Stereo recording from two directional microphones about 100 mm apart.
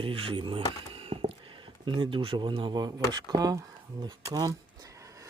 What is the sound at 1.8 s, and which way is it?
Speech, 55° right (ahead or behind).